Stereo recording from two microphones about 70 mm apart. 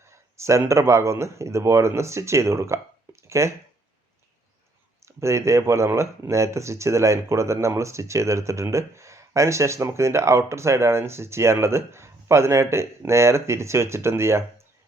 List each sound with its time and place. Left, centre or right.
0.0 s a sound: right
0.7 s speech: right
5.0 s speech: right